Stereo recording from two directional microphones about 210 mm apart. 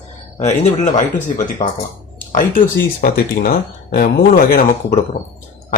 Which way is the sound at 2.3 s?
40° left (ahead or behind).